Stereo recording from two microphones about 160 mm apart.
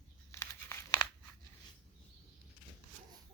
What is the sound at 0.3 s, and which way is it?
Crumpling, 15° left (ahead or behind).